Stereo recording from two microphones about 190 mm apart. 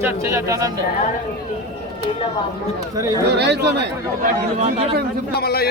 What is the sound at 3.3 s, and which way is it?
Speech, 65° right (ahead or behind).